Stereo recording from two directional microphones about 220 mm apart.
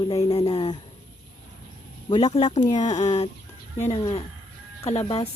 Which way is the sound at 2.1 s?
25° left (ahead or behind).